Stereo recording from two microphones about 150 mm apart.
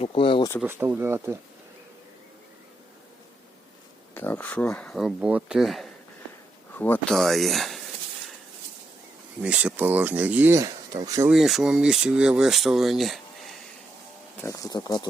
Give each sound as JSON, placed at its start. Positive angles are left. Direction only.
{"t": 0.0, "sound": "speech", "side_deg": 35}
{"t": 0.6, "sound": "speech", "side_deg": -15}
{"t": 4.1, "sound": "speech", "side_deg": 15}
{"t": 6.7, "sound": "speech", "side_deg": 10}
{"t": 7.1, "sound": "speech", "side_deg": 0}
{"t": 9.4, "sound": "speech", "side_deg": -10}
{"t": 11.3, "sound": "speech", "side_deg": 0}
{"t": 14.3, "sound": "speech", "side_deg": 20}